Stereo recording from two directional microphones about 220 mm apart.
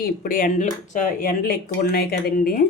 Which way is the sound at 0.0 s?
40° left (ahead or behind).